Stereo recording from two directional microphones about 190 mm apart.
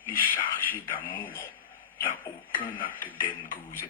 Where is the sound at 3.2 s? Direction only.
45° left (ahead or behind).